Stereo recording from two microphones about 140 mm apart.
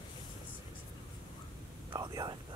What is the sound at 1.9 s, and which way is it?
Whispering, 25° right (ahead or behind).